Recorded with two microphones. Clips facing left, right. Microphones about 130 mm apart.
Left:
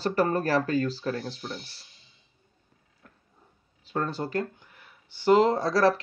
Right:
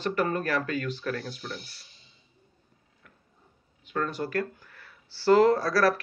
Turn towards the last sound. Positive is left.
turn(degrees=25)  # may be behind; listen again after turning